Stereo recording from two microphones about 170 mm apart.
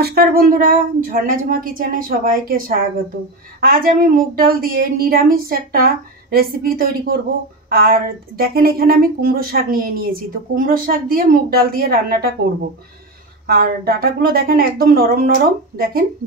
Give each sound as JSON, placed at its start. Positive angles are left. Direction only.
{"t": 0.0, "sound": "speech", "side_deg": -65}
{"t": 13.5, "sound": "speech", "side_deg": -60}